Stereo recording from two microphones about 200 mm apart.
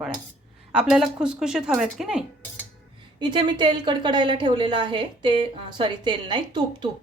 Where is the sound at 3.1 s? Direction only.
25° right (ahead or behind).